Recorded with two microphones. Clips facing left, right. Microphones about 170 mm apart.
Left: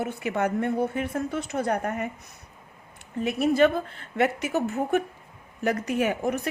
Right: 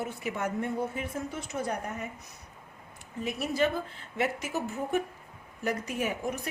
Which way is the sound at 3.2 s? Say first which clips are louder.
Left 8 dB; 65° left (ahead or behind).